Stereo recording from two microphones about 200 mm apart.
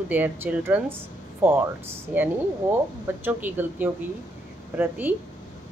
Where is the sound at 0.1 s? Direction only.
10° right (ahead or behind).